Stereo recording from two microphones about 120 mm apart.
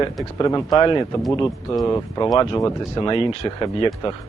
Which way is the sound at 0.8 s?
40° left (ahead or behind).